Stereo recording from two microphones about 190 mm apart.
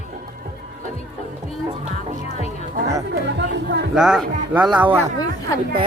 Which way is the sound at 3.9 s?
Centre (ahead or behind).